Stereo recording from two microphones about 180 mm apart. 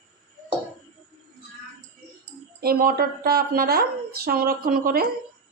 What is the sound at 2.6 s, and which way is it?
Speech, 55° right (ahead or behind).